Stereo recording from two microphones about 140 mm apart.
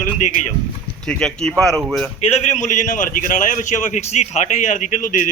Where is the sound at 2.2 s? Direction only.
50° left (ahead or behind).